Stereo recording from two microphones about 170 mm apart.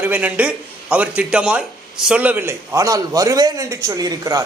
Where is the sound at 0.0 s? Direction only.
10° right (ahead or behind).